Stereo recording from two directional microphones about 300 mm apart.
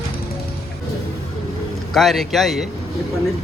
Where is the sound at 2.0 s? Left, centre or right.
Centre.